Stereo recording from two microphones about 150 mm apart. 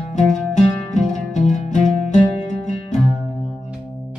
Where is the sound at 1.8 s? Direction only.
Centre (ahead or behind).